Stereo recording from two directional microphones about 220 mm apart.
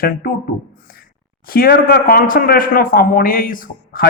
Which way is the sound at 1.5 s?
40° left (ahead or behind).